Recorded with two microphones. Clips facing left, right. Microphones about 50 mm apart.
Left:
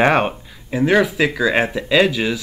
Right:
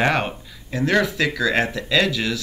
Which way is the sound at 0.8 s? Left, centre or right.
Centre.